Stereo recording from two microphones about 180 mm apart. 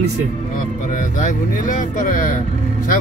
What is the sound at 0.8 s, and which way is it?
Speech, 45° left (ahead or behind).